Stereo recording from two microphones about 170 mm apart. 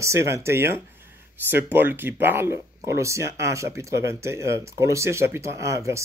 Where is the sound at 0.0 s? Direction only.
15° right (ahead or behind).